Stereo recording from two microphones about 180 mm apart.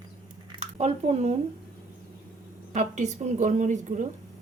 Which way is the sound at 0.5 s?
35° right (ahead or behind).